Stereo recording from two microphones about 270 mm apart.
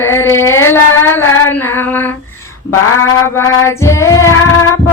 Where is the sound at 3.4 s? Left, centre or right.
Left.